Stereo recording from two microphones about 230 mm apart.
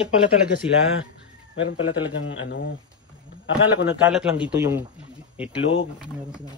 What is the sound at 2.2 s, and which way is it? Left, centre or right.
Speech, left.